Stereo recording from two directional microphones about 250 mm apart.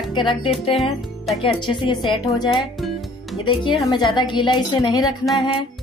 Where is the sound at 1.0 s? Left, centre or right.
Centre.